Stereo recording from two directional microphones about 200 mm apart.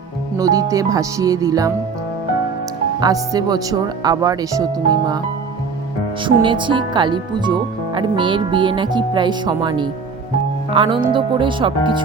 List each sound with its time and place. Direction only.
0.3 s speech: 15° right (ahead or behind)
3.0 s speech: 20° right (ahead or behind)
6.2 s speech: 25° right (ahead or behind)